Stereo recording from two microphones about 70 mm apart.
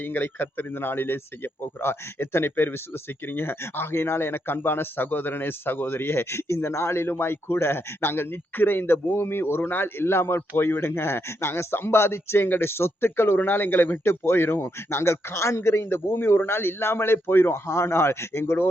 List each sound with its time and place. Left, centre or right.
0.0 s speech: left